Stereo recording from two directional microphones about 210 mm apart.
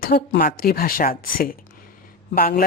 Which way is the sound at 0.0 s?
45° left (ahead or behind).